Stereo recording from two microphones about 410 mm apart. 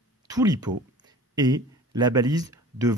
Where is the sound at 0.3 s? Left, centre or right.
Centre.